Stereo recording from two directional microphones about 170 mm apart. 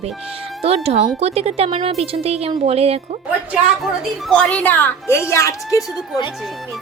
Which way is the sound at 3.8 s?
5° left (ahead or behind).